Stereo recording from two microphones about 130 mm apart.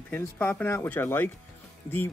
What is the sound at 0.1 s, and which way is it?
Speech, 15° left (ahead or behind).